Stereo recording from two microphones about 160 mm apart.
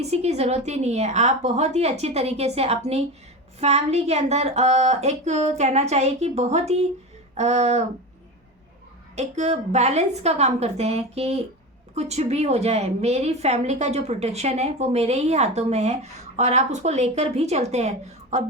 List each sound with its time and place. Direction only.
0.0 s a woman's voice: 40° right (ahead or behind)
9.1 s a woman's voice: 45° right (ahead or behind)